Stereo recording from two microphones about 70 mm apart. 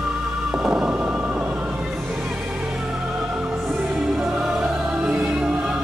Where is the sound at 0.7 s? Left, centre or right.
Centre.